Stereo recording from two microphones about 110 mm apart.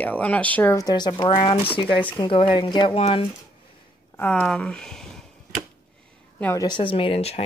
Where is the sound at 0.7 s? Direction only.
35° left (ahead or behind); by 3.2 s 60° left (ahead or behind).